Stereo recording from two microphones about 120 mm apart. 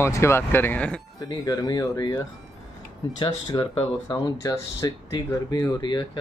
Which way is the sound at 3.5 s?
35° left (ahead or behind).